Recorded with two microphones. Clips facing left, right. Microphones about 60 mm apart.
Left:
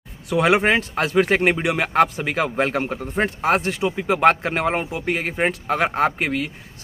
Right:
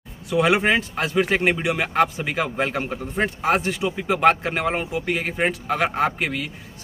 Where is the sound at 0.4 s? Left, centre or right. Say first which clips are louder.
Left 1 dB; left.